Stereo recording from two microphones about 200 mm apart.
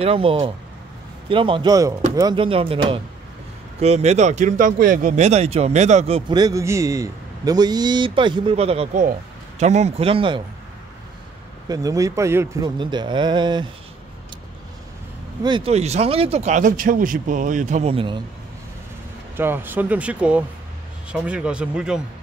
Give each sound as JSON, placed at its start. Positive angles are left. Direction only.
{"t": 0.0, "sound": "speech", "side_deg": -30}
{"t": 11.7, "sound": "speech", "side_deg": -15}
{"t": 15.4, "sound": "speech", "side_deg": -25}
{"t": 19.3, "sound": "speech", "side_deg": -10}